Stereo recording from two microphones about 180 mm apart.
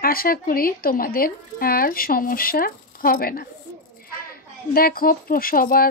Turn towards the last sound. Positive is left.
turn(degrees=55)  # may be behind; listen again after turning